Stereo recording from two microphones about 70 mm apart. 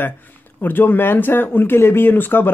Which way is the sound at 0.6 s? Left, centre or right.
Left.